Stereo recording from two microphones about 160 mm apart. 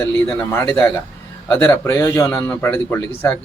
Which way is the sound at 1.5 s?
15° left (ahead or behind).